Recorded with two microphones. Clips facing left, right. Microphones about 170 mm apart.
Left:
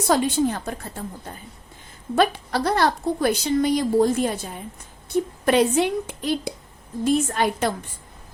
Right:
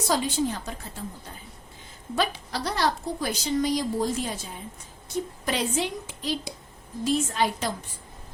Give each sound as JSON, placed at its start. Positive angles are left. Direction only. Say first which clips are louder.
{"t": 0.1, "sound": "speech", "louder": "left 6 dB", "side_deg": 55}